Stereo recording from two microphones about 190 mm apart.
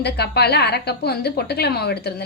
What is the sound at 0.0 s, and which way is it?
A woman's voice, 60° left (ahead or behind).